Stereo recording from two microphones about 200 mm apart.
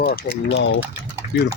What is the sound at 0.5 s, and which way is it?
Speech, 75° left (ahead or behind).